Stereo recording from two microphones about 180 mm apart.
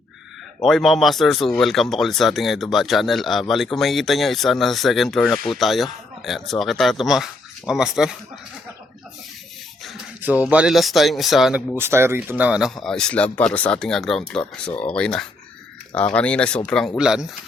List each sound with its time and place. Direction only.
0.6 s speech: centre (ahead or behind)
9.8 s speech: 5° right (ahead or behind)
11.8 s speech: 15° right (ahead or behind); by 14.2 s centre (ahead or behind)
14.4 s speech: 25° left (ahead or behind)
14.8 s speech: 5° left (ahead or behind)